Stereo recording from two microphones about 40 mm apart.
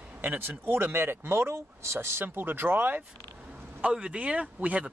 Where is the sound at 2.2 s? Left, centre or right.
Right.